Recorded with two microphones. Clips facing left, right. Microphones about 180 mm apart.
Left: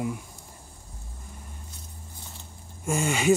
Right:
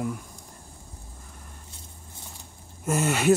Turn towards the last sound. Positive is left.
turn(degrees=0)  # may be behind; listen again after turning